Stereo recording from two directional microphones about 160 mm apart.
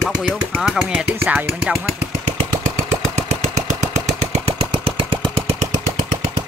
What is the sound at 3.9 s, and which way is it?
Lawn mower, 40° right (ahead or behind).